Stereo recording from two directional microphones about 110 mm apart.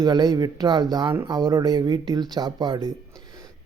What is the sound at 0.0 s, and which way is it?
A man's voice, 40° right (ahead or behind).